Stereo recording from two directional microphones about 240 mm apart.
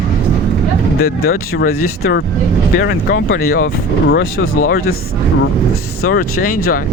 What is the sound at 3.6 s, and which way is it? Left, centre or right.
Speech, left.